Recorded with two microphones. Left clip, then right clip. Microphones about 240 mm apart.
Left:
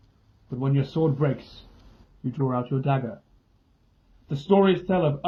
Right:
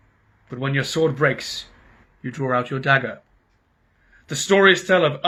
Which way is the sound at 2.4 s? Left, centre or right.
Right.